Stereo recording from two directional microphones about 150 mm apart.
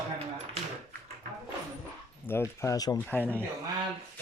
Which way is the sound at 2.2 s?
15° left (ahead or behind).